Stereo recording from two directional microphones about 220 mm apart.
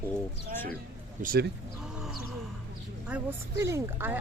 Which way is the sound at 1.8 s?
Centre (ahead or behind).